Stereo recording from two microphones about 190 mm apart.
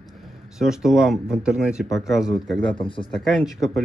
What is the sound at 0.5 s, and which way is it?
Speech, centre (ahead or behind).